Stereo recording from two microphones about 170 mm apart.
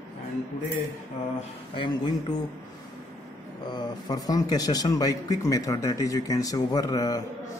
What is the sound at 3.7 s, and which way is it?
Speech, 25° left (ahead or behind).